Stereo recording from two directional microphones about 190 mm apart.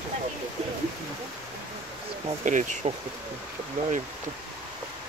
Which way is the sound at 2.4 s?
40° right (ahead or behind).